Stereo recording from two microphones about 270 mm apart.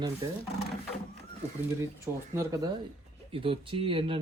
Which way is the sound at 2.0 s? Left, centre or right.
Centre.